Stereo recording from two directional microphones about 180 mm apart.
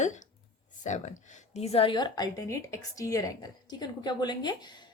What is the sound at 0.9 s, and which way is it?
A woman's voice, 40° left (ahead or behind).